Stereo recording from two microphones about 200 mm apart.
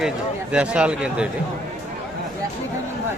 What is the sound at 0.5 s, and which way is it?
Speech, 5° right (ahead or behind).